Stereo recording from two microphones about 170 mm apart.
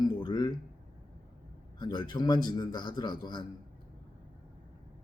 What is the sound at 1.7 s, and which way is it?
A man's voice, 25° left (ahead or behind).